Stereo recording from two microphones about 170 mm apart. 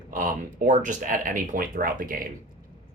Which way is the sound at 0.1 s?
50° right (ahead or behind).